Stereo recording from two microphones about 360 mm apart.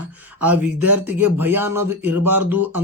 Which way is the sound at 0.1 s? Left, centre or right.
Centre.